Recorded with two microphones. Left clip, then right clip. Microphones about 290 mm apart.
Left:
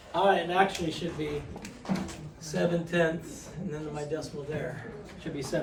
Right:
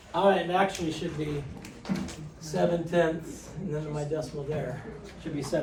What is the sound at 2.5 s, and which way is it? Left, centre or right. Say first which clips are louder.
Speech: right 3 dB; centre.